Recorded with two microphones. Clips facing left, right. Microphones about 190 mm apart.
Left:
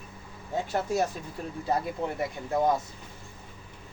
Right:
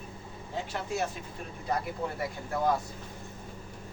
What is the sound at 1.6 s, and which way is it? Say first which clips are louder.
Speech: left 3 dB; 25° left (ahead or behind).